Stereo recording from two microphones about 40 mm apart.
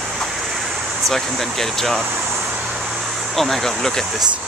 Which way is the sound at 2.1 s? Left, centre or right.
Right.